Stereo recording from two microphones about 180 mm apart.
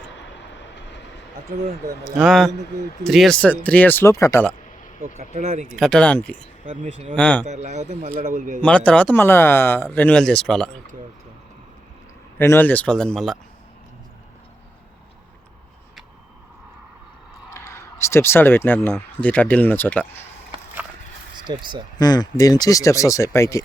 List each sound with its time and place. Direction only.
2.0 s speech: centre (ahead or behind); by 4.4 s 15° left (ahead or behind)
4.9 s speech: 40° right (ahead or behind)
5.6 s speech: centre (ahead or behind)
6.7 s speech: 30° right (ahead or behind)
7.2 s speech: 5° left (ahead or behind)
7.5 s speech: 40° right (ahead or behind)
8.6 s speech: 5° left (ahead or behind)
12.4 s speech: 10° left (ahead or behind)
17.5 s speech: 15° left (ahead or behind)
21.4 s speech: 25° right (ahead or behind)
21.9 s speech: 20° left (ahead or behind)